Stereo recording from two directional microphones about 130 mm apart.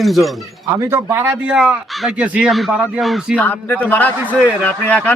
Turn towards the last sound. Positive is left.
turn(degrees=10)  # may be behind; listen again after turning